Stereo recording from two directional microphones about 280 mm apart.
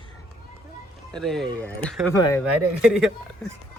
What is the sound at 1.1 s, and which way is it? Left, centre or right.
Speech, centre.